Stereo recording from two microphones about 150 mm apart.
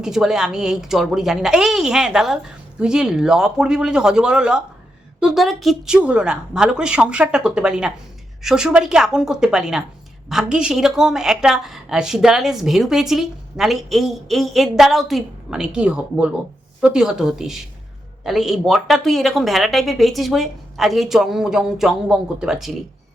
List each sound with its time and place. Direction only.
0.0 s a woman's voice: 5° right (ahead or behind)